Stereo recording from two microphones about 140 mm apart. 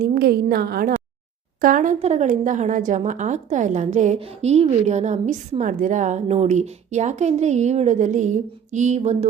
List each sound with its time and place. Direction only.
0.0 s a woman's voice: 90° right
1.6 s speech: 70° right (ahead or behind)
2.0 s a woman's voice: 50° right (ahead or behind)
4.2 s a woman's voice: 45° right (ahead or behind)